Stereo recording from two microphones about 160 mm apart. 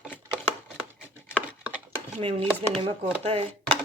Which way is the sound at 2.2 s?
35° right (ahead or behind).